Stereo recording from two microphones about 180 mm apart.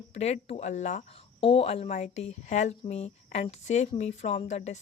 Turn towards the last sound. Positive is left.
turn(degrees=40)  # may be behind; listen again after turning